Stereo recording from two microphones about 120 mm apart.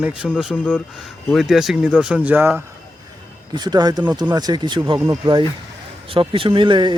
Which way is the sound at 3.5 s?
35° right (ahead or behind).